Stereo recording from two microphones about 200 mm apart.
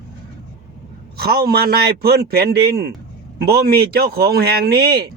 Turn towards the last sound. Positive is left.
turn(degrees=-50)  # may be behind; listen again after turning